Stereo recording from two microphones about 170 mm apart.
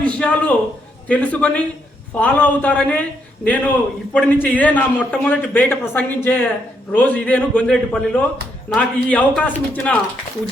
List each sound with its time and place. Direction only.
0.2 s a man's voice: 5° left (ahead or behind)